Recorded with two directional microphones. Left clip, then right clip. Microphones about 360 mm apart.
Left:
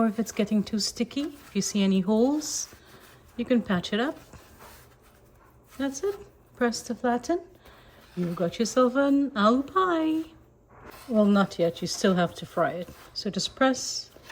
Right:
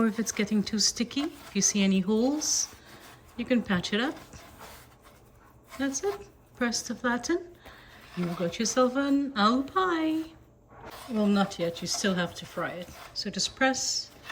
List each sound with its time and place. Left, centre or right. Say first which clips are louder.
0.0 s speech: left 2 dB; centre
5.7 s speech: left 1 dB; centre